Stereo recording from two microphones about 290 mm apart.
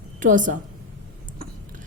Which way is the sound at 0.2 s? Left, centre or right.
Right.